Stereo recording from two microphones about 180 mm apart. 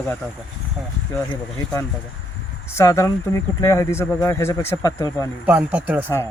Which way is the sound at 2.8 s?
15° left (ahead or behind).